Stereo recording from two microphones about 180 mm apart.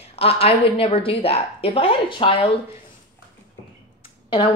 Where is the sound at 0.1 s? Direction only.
30° left (ahead or behind).